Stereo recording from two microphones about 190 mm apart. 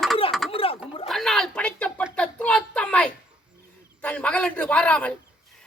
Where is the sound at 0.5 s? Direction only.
30° left (ahead or behind).